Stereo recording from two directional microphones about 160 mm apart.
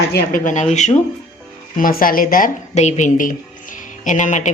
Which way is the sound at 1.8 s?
60° left (ahead or behind).